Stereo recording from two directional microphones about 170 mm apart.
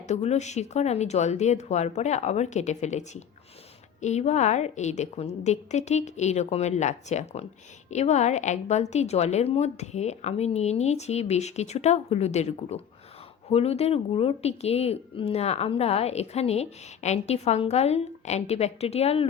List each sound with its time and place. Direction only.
0.1 s speech: 40° left (ahead or behind)